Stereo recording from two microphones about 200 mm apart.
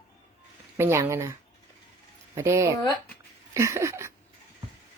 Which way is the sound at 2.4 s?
15° right (ahead or behind).